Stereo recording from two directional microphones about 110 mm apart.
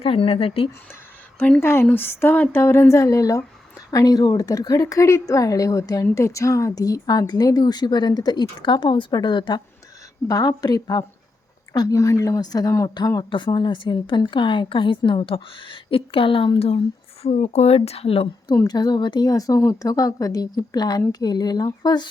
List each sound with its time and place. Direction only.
0.0 s speech: 60° left (ahead or behind)
1.4 s speech: 10° left (ahead or behind)
1.6 s speech: 20° left (ahead or behind); by 16.8 s 60° left (ahead or behind)
17.2 s speech: 85° left; by 18.3 s 60° left (ahead or behind)
18.4 s speech: 35° left (ahead or behind)